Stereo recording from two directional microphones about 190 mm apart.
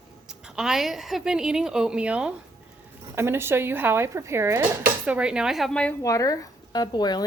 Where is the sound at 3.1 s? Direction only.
10° right (ahead or behind); by 5.9 s 5° left (ahead or behind).